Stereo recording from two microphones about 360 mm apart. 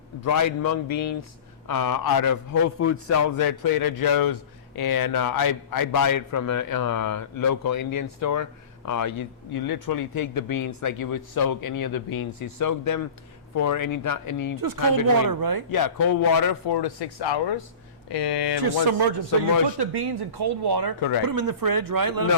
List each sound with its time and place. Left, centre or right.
0.3 s speech: left
1.6 s speech: left
2.7 s a man's voice: left
3.2 s speech: left
9.6 s speech: left
14.6 s speech: right
15.7 s speech: left
18.6 s speech: right
19.8 s speech: right
21.2 s speech: right